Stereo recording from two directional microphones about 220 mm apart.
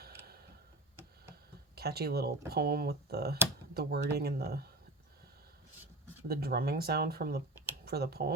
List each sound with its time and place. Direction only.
1.7 s speech: 45° right (ahead or behind)
6.2 s speech: 45° right (ahead or behind)